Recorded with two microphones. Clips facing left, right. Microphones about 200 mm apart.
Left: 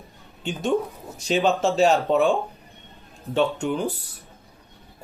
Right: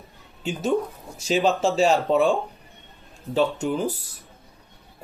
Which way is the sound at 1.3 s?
Centre (ahead or behind).